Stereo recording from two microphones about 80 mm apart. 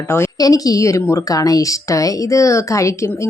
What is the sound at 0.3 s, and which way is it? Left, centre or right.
Speech, left.